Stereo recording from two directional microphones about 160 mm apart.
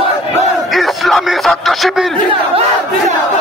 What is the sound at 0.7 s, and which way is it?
Music, centre (ahead or behind).